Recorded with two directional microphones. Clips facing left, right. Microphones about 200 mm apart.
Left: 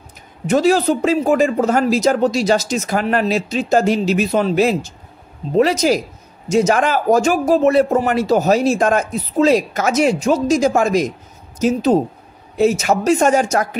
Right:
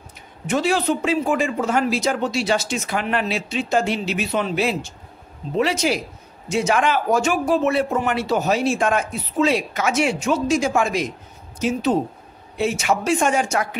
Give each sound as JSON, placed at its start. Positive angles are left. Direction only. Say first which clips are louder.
{"t": 0.5, "sound": "a man's voice", "louder": "left 6 dB", "side_deg": 40}